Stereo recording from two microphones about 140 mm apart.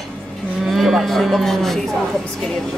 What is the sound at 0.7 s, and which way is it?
Speech, centre (ahead or behind).